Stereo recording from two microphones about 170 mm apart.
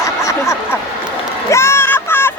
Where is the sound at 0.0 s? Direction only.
15° left (ahead or behind).